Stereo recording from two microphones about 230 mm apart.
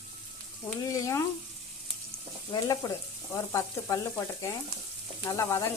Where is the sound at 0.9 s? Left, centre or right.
Centre.